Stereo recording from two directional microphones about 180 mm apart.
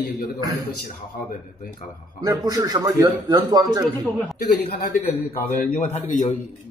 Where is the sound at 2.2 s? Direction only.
20° right (ahead or behind).